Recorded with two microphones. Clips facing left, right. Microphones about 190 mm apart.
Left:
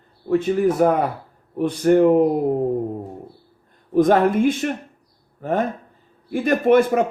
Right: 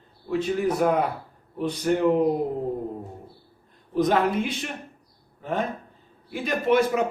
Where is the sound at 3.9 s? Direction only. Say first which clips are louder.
Left 6 dB; 50° left (ahead or behind).